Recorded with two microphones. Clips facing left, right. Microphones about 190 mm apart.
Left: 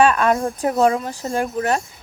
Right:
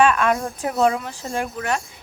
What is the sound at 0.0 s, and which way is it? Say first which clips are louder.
Speech: left 2 dB; 35° left (ahead or behind).